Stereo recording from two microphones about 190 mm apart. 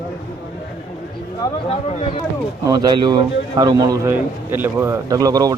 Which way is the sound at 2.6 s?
20° right (ahead or behind).